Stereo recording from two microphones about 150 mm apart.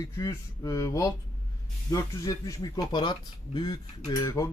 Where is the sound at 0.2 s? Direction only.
25° left (ahead or behind).